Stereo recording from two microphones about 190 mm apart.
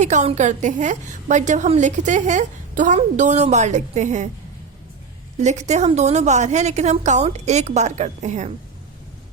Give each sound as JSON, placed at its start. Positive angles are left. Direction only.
{"t": 0.0, "sound": "a woman's voice", "side_deg": -40}
{"t": 5.4, "sound": "a woman's voice", "side_deg": -35}